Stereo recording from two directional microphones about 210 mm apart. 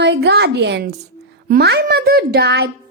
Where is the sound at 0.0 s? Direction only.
50° right (ahead or behind).